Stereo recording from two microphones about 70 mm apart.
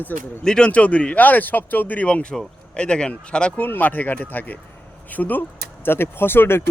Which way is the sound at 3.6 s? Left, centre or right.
Left.